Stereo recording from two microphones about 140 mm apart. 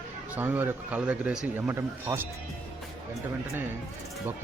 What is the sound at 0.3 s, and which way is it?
Speech, 15° right (ahead or behind).